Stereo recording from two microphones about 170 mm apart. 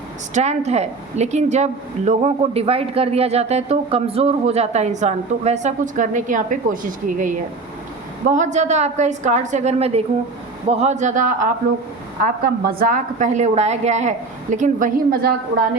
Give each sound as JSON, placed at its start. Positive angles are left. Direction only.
{"t": 0.3, "sound": "a woman's voice", "side_deg": -40}